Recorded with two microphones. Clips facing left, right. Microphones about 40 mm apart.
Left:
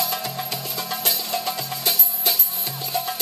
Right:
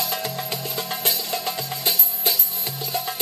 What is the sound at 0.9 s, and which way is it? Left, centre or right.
Music, right.